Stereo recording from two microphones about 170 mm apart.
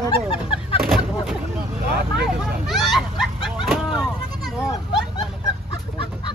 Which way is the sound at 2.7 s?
Centre (ahead or behind).